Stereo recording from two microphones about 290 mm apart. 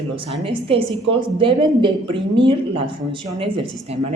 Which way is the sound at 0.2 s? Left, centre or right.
Centre.